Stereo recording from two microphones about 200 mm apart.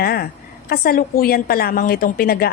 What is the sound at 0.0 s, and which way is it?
A woman's voice, 50° left (ahead or behind).